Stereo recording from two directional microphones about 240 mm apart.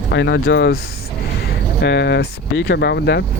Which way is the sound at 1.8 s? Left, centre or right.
Left.